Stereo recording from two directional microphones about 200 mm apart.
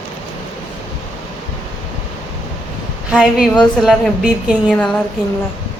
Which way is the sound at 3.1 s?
Centre (ahead or behind).